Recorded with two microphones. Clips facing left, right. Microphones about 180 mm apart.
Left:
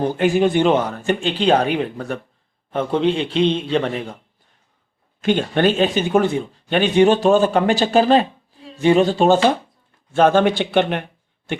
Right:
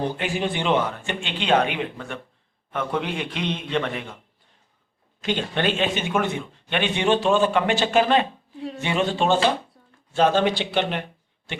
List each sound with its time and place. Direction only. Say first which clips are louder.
0.2 s a man's voice: left 10 dB; 45° left (ahead or behind)
2.7 s a man's voice: left 8 dB; 30° left (ahead or behind)
5.2 s a man's voice: left 7 dB; 50° left (ahead or behind)
10.1 s speech: left 5 dB; 50° left (ahead or behind)